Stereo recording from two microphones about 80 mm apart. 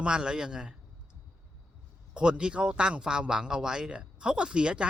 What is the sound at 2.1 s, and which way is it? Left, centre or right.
Speech, centre.